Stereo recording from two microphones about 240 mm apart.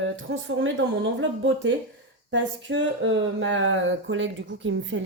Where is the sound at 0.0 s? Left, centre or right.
Right.